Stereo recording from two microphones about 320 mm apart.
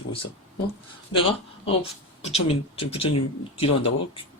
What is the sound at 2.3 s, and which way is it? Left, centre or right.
Speech, centre.